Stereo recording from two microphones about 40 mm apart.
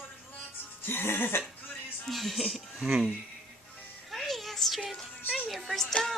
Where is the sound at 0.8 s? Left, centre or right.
Left.